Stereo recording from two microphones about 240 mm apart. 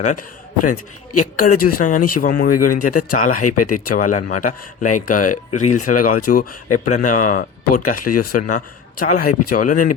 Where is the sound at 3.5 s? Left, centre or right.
Left.